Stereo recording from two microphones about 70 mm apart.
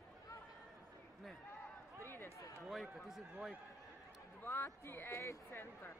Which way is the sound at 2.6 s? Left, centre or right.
Centre.